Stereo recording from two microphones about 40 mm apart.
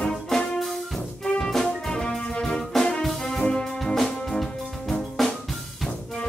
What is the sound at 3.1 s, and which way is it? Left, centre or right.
Brass instrument, centre.